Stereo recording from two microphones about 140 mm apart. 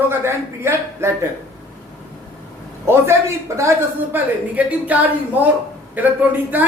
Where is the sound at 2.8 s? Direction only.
20° right (ahead or behind).